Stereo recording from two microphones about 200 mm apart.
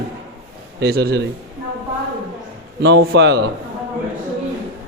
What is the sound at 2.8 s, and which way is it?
Speech, 60° right (ahead or behind).